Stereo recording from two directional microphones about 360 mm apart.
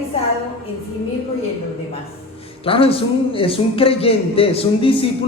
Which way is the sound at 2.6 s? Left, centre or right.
Centre.